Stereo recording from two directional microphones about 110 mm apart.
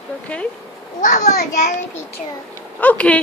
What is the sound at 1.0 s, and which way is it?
Speech, 90° left.